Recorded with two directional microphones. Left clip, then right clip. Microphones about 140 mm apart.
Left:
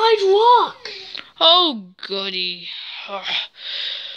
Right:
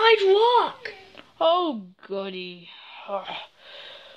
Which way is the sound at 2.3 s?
90° left.